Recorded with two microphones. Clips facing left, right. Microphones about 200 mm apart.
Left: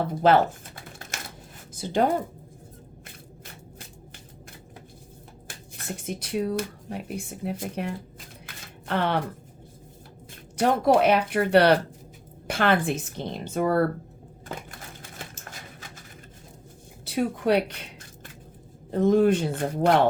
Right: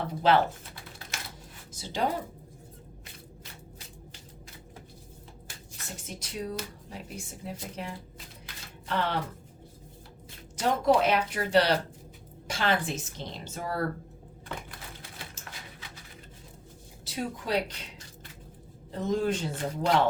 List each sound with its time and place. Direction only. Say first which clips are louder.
0.2 s speech: left 4 dB; 50° left (ahead or behind)
1.1 s a sound: left 3 dB; 50° left (ahead or behind)
1.7 s speech: left 7 dB; 55° left (ahead or behind)
5.5 s speech: left 8 dB; 55° left (ahead or behind)
10.6 s speech: left 4 dB; 60° left (ahead or behind)
15.2 s a sound: left 4 dB; 45° left (ahead or behind)
17.1 s speech: left 8 dB; 60° left (ahead or behind)
18.9 s speech: left 9 dB; 55° left (ahead or behind)